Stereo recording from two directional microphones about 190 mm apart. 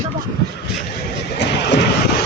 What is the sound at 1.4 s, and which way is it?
Vehicle, 65° left (ahead or behind).